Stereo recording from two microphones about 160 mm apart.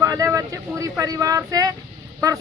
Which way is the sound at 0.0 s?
20° right (ahead or behind).